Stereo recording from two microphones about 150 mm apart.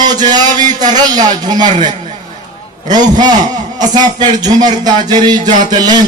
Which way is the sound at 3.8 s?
30° right (ahead or behind).